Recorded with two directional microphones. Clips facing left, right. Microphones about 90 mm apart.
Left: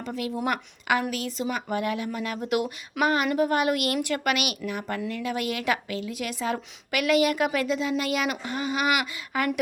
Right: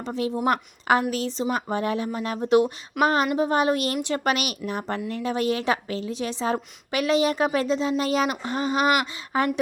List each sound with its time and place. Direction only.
0.0 s a woman's voice: 30° right (ahead or behind)